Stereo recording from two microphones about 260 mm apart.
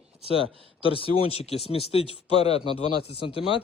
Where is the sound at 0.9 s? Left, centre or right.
Left.